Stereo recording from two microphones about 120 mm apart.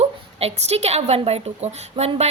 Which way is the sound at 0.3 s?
60° right (ahead or behind).